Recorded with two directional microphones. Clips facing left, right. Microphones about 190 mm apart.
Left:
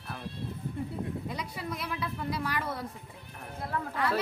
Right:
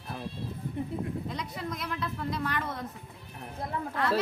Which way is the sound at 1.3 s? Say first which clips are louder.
Right 1 dB; 10° left (ahead or behind).